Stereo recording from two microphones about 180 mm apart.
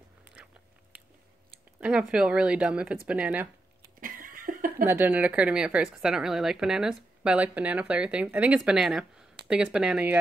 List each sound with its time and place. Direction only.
0.4 s biting: 5° right (ahead or behind)
1.8 s a woman's voice: 5° right (ahead or behind)
4.0 s a sound: 50° right (ahead or behind)
4.8 s a woman's voice: 10° right (ahead or behind)